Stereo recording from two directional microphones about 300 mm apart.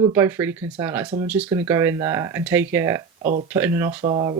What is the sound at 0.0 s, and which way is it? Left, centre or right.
Speech, centre.